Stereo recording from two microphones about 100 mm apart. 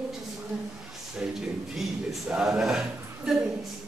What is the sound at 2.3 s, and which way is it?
Speech, 5° right (ahead or behind).